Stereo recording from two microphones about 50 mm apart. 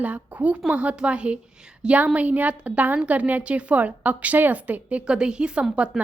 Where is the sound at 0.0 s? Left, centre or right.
Right.